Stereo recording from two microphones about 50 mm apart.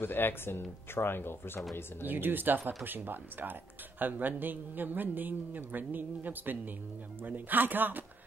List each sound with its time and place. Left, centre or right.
0.0 s speech: left
2.0 s a man's voice: right